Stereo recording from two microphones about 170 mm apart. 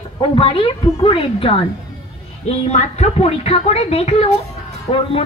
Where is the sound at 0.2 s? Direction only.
30° left (ahead or behind).